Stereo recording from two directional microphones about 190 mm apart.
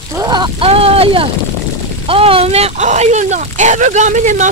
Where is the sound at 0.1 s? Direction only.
20° right (ahead or behind).